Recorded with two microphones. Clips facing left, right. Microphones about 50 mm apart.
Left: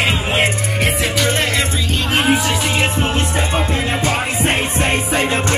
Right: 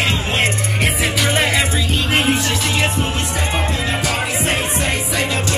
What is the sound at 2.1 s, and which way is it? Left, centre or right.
Music, centre.